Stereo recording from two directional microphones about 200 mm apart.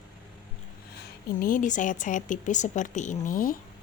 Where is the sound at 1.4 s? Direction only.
40° left (ahead or behind).